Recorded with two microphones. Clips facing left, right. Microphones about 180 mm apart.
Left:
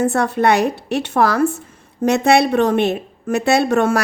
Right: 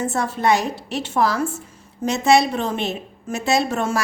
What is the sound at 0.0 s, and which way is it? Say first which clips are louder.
Speech: left 5 dB; 60° left (ahead or behind).